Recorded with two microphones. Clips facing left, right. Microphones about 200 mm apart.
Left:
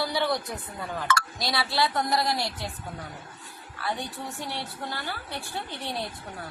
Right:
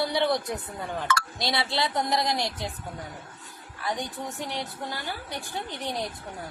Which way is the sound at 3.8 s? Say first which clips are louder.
Right 1 dB; 15° right (ahead or behind).